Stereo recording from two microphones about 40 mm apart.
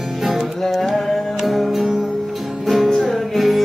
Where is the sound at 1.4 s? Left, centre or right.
Centre.